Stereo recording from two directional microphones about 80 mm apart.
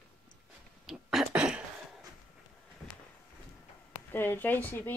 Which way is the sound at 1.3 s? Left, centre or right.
Centre.